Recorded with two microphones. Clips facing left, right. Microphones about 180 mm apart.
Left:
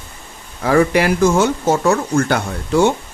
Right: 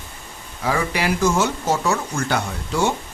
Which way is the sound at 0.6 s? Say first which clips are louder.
Left 8 dB; 55° left (ahead or behind).